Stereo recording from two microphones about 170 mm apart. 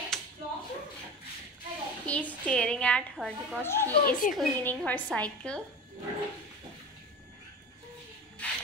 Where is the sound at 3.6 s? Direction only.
15° left (ahead or behind).